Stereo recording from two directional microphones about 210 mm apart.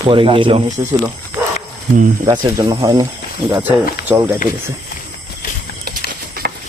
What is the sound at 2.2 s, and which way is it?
Speech, 20° right (ahead or behind).